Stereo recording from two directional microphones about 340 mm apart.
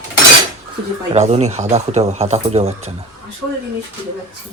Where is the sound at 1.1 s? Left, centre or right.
Centre.